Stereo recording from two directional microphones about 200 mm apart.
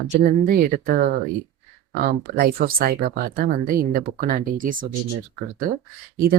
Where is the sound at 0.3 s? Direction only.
45° right (ahead or behind).